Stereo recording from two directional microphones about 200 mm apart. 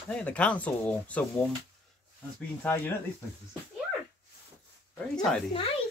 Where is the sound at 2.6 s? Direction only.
10° left (ahead or behind).